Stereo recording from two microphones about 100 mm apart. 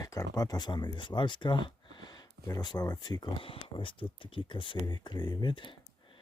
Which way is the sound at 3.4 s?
60° left (ahead or behind).